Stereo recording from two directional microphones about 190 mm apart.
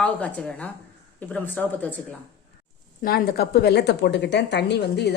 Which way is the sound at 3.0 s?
50° left (ahead or behind).